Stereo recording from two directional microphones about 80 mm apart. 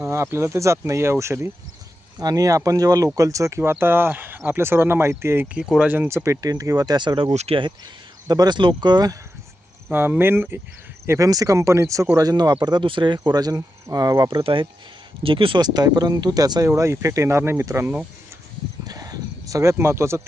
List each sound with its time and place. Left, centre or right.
0.0 s speech: right
2.1 s speech: right
5.5 s speech: centre
6.1 s speech: right
6.4 s speech: right
8.3 s speech: right
9.9 s speech: right
11.3 s speech: right
12.1 s speech: right
12.6 s speech: right
13.2 s speech: right
14.3 s speech: right
16.6 s speech: right
18.9 s a sound: right